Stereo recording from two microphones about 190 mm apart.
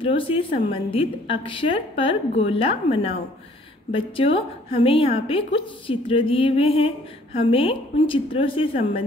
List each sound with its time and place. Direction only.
0.0 s a woman's voice: 30° left (ahead or behind)